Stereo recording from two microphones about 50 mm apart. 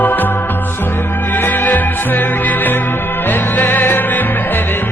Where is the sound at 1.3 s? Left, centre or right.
Left.